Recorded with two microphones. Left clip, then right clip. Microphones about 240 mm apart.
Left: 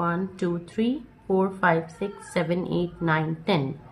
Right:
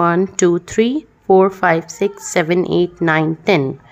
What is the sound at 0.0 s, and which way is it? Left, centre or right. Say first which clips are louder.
Speech: right 13 dB; right.